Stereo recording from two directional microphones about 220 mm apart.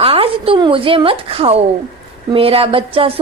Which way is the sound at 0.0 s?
25° right (ahead or behind).